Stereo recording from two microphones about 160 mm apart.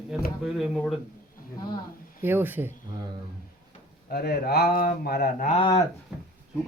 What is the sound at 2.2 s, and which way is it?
Speech, 10° right (ahead or behind).